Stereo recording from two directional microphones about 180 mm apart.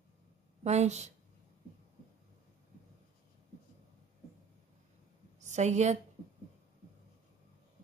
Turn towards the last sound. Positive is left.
turn(degrees=-40)  # may be behind; listen again after turning